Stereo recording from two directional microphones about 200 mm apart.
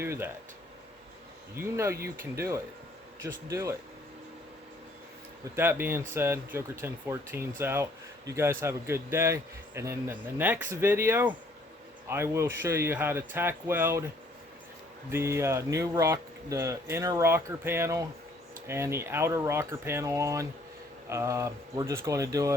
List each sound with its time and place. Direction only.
0.0 s speech: 10° right (ahead or behind)
1.6 s speech: 15° right (ahead or behind)
5.5 s speech: 10° right (ahead or behind)
15.1 s speech: 15° right (ahead or behind)